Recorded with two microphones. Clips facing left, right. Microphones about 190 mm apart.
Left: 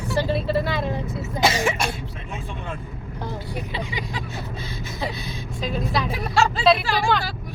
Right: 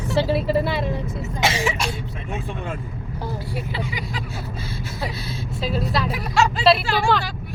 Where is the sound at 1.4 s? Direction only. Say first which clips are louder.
Left 2 dB; 45° left (ahead or behind).